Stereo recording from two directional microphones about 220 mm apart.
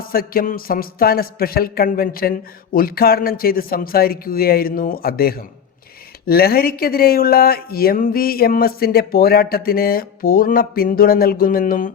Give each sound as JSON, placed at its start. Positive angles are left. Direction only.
{"t": 0.0, "sound": "speech", "side_deg": 40}